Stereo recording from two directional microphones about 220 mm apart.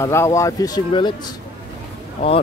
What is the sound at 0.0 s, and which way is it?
Speech, 10° left (ahead or behind).